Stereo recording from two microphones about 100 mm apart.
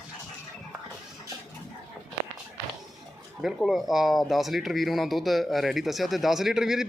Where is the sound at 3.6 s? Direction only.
5° right (ahead or behind).